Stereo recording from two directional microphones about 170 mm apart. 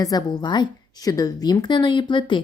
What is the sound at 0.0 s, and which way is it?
A woman's voice, 20° left (ahead or behind).